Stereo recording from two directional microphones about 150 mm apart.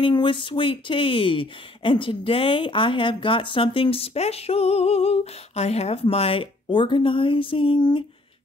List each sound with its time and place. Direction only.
0.0 s speech: 35° left (ahead or behind)